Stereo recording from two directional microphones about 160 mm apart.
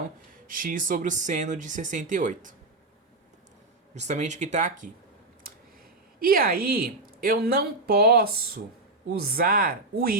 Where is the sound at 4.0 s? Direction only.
45° right (ahead or behind).